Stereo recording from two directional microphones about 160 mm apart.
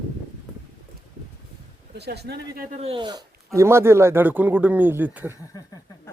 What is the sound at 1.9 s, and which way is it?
Speech, 90° right.